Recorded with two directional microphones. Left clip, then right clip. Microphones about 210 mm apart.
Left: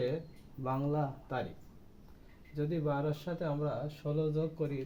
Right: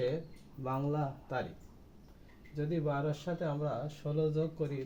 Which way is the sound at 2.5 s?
20° left (ahead or behind).